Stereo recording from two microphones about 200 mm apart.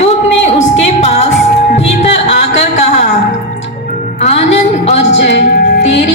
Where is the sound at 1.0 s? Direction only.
35° left (ahead or behind).